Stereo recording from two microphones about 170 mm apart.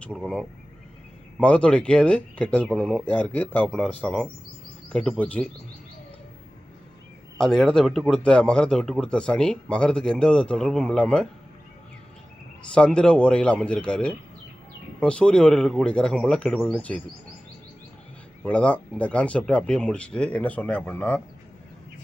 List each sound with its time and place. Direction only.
0.0 s speech: 5° left (ahead or behind)
7.3 s speech: 5° left (ahead or behind)
12.7 s speech: 5° left (ahead or behind)
18.4 s speech: 10° left (ahead or behind)